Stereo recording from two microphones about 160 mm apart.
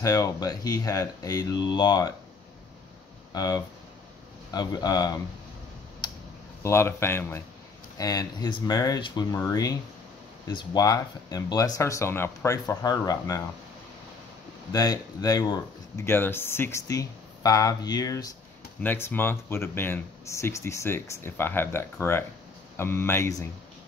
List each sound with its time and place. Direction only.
0.0 s speech: 20° left (ahead or behind)
3.3 s speech: 25° left (ahead or behind)
6.0 s a sound: 25° left (ahead or behind)
6.6 s speech: 15° left (ahead or behind)
14.7 s speech: 25° left (ahead or behind)